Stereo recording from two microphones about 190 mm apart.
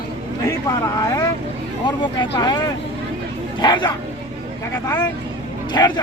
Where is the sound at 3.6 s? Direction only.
20° left (ahead or behind).